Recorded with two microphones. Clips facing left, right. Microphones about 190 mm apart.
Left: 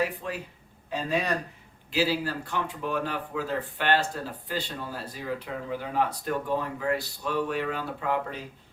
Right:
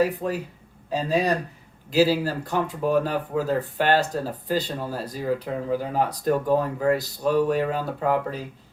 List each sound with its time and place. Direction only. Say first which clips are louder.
0.0 s speech: right 7 dB; 40° right (ahead or behind)